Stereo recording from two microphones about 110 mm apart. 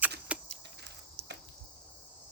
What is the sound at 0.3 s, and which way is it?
Keys jangling, 10° right (ahead or behind).